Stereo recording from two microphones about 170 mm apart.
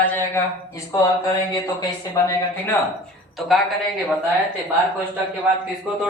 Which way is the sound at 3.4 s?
Centre (ahead or behind).